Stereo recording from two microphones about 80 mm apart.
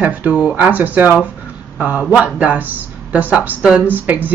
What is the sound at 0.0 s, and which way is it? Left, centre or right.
Speech, centre.